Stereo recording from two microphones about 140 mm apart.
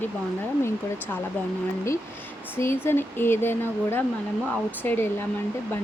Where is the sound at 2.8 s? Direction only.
15° left (ahead or behind).